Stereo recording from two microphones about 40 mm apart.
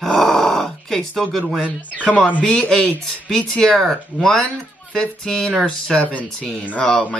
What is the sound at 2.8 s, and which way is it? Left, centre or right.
Speech, centre.